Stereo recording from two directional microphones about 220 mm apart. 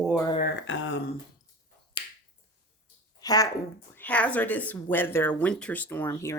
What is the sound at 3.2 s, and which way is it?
Speech, 15° left (ahead or behind).